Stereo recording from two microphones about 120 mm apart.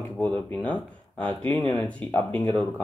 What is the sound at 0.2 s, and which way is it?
Speech, 10° left (ahead or behind).